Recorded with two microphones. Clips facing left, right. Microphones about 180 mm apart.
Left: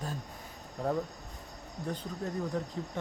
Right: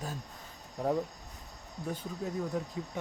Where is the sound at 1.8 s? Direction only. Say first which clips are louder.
Even; 5° right (ahead or behind).